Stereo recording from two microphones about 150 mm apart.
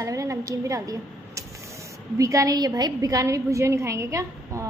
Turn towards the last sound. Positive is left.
turn(degrees=-20)  # may be behind; listen again after turning